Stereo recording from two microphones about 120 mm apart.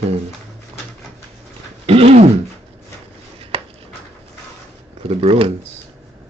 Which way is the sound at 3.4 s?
55° right (ahead or behind).